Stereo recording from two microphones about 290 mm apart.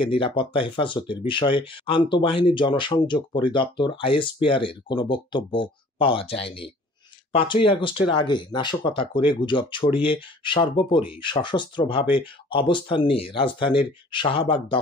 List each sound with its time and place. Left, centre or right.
0.1 s speech: centre